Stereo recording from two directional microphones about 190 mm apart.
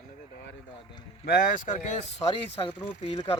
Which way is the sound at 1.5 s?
40° left (ahead or behind).